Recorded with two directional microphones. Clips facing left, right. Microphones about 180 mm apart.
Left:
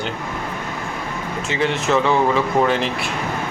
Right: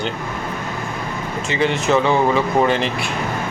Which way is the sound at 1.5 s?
Centre (ahead or behind).